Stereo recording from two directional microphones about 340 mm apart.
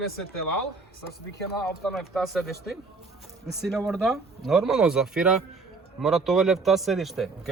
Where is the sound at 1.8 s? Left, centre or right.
Centre.